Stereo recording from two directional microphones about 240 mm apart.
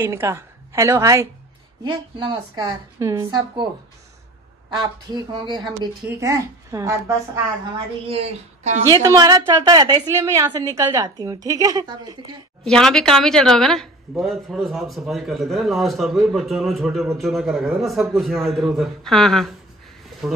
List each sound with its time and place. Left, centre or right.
0.0 s a woman's voice: centre
4.7 s a woman's voice: centre
8.1 s speech: right
8.9 s a woman's voice: centre
12.6 s speech: centre